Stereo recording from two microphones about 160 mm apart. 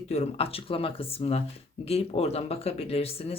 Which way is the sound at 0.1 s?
40° left (ahead or behind).